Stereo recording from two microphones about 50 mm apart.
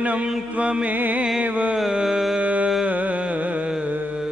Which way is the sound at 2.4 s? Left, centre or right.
Right.